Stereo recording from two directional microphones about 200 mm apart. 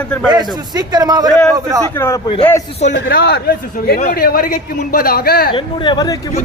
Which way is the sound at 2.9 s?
50° left (ahead or behind).